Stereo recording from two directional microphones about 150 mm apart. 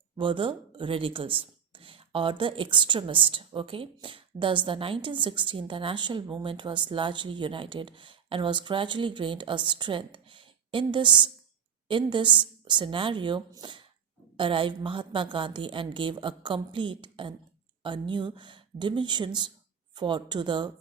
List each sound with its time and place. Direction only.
0.2 s speech: 35° right (ahead or behind)